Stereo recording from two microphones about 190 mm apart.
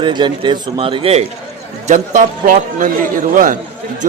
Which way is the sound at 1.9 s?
40° right (ahead or behind).